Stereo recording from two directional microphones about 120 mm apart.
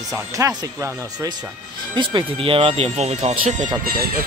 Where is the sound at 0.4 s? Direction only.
25° right (ahead or behind).